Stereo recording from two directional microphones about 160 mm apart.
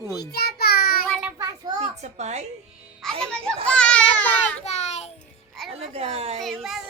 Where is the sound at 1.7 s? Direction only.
45° right (ahead or behind).